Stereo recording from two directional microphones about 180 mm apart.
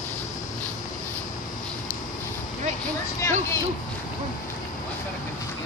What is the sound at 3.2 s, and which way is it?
Speech, 15° left (ahead or behind).